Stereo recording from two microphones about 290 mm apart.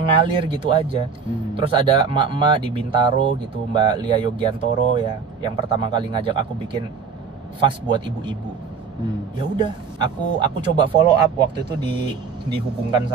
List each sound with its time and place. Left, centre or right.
0.0 s speech: centre
9.6 s speech: centre